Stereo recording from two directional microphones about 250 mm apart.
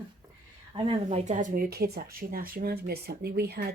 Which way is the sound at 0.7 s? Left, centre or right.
Right.